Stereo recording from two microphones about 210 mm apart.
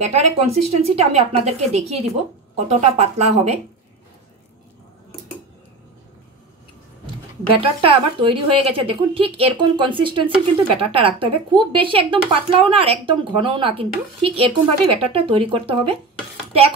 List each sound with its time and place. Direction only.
0.0 s a woman's voice: 30° right (ahead or behind)
7.5 s a woman's voice: 25° right (ahead or behind)